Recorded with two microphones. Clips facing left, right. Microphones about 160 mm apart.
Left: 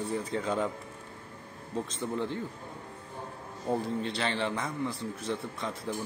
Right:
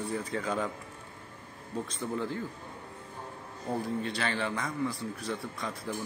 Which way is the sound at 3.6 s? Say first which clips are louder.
Left 2 dB; 25° left (ahead or behind).